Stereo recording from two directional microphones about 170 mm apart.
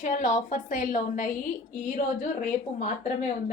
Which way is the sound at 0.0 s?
50° left (ahead or behind).